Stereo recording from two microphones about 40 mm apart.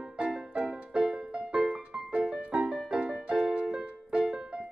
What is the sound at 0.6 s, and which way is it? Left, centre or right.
Music, right.